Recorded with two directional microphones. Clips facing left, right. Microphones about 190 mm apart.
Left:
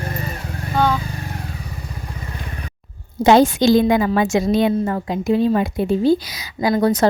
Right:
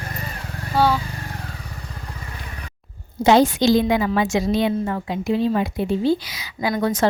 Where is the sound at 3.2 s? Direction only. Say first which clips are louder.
Left 2 dB; 50° left (ahead or behind).